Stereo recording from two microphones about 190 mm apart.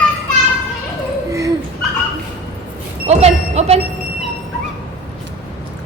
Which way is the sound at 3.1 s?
35° right (ahead or behind).